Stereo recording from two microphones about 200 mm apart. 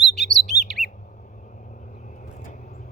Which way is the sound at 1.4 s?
40° left (ahead or behind).